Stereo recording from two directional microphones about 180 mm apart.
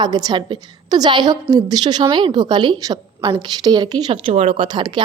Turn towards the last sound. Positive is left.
turn(degrees=-25)  # may be behind; listen again after turning